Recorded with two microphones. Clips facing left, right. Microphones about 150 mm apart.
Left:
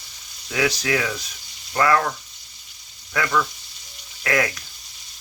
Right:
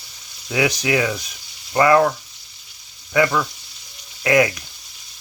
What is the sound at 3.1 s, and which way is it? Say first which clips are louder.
Speech: right 5 dB; 15° right (ahead or behind).